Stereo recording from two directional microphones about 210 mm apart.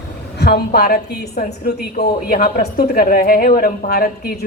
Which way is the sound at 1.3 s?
35° left (ahead or behind).